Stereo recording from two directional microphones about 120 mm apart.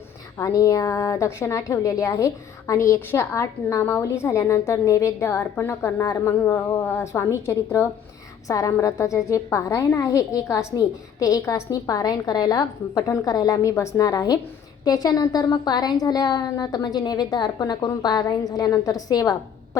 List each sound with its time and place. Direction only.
0.3 s a woman's voice: 25° left (ahead or behind)